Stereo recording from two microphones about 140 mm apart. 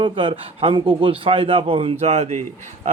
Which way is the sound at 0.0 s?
40° right (ahead or behind).